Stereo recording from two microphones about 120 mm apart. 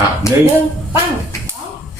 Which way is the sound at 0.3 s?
25° left (ahead or behind).